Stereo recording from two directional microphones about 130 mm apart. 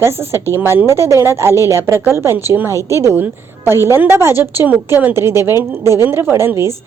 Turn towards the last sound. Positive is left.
turn(degrees=-20)  # may be behind; listen again after turning